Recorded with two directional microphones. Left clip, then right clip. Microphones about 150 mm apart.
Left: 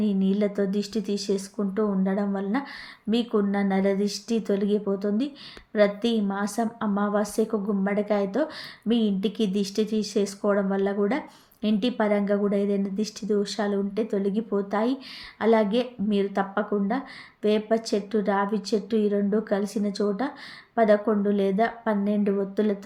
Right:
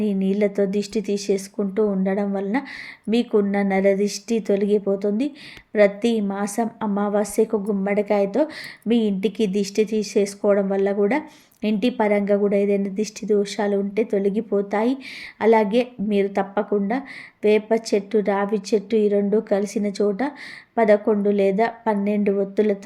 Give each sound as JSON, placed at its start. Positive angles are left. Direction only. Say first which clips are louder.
{"t": 0.0, "sound": "a woman's voice", "louder": "right 4 dB", "side_deg": -20}